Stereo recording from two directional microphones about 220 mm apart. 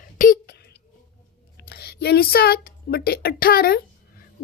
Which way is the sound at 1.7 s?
45° left (ahead or behind).